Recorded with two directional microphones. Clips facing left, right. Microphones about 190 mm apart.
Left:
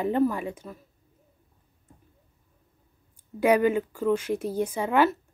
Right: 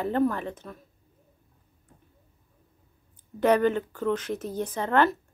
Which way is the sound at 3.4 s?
10° left (ahead or behind).